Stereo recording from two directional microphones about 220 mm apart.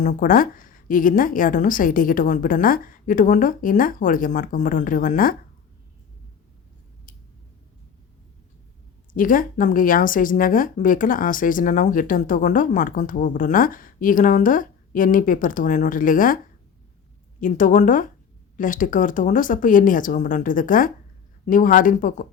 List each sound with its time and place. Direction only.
0.0 s speech: 35° left (ahead or behind)
9.1 s speech: 40° left (ahead or behind)
17.4 s speech: 35° left (ahead or behind)